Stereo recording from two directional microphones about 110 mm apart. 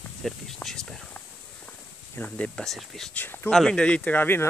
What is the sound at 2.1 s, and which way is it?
Speech, 10° left (ahead or behind).